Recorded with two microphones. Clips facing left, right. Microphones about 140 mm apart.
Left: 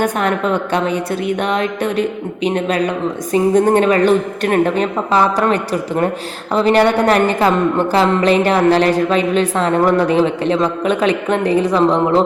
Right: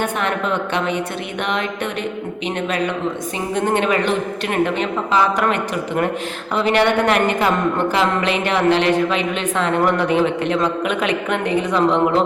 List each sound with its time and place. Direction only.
0.0 s speech: 40° left (ahead or behind)